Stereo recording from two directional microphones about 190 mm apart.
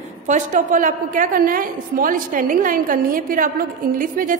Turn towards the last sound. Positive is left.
turn(degrees=-45)  # may be behind; listen again after turning